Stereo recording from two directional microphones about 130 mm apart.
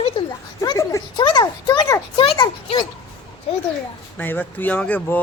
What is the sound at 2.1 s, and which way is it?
Speech, 45° left (ahead or behind).